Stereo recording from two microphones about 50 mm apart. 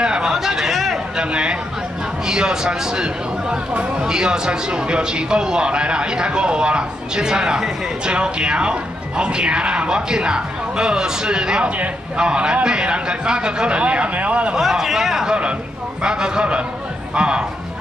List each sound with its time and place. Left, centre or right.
0.0 s a sound: centre
1.1 s speech: centre
14.5 s speech: centre
17.1 s music: centre